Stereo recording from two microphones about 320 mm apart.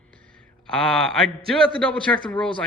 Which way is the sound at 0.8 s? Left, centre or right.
Centre.